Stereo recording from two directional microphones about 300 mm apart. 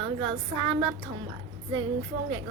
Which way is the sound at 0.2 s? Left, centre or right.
Centre.